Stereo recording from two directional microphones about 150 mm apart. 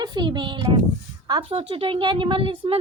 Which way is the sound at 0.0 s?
30° right (ahead or behind).